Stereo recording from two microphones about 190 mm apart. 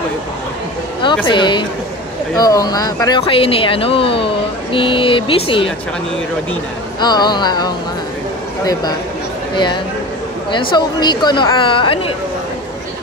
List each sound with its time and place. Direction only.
1.2 s speech: 25° left (ahead or behind)
7.0 s speech: 20° left (ahead or behind)
10.5 s speech: 25° left (ahead or behind)